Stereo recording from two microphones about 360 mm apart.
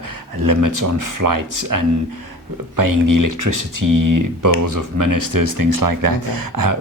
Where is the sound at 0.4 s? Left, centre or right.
Right.